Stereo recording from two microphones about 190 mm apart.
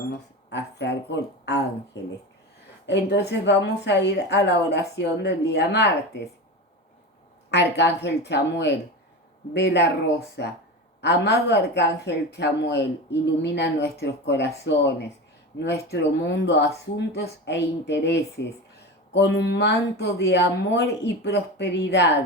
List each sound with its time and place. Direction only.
0.5 s a woman's voice: 65° left (ahead or behind)
7.5 s a woman's voice: 65° left (ahead or behind)